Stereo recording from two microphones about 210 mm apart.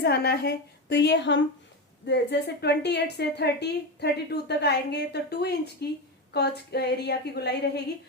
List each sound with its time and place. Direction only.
0.0 s a woman's voice: 50° left (ahead or behind)